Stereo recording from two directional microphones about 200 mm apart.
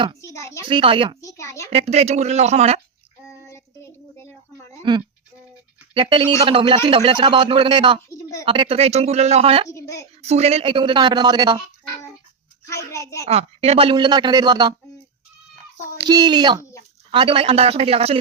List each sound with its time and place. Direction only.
0.2 s speech: 15° left (ahead or behind)
0.6 s a man's voice: 25° right (ahead or behind)
1.2 s a woman's voice: 15° left (ahead or behind)
1.7 s speech: 30° right (ahead or behind)
4.8 s a man's voice: 20° right (ahead or behind)
8.1 s a sound: 15° left (ahead or behind)
8.4 s speech: 25° right (ahead or behind)
9.6 s a woman's voice: 15° left (ahead or behind)
10.2 s a man's voice: 30° right (ahead or behind)
12.6 s a sound: 15° left (ahead or behind)
13.2 s a man's voice: 30° right (ahead or behind)
16.0 s a man's voice: 20° right (ahead or behind)